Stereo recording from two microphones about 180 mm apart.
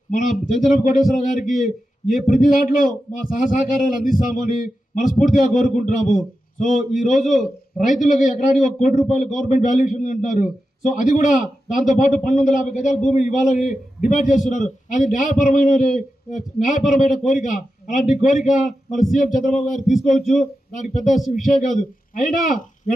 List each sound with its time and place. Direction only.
0.9 s a man's voice: 45° left (ahead or behind)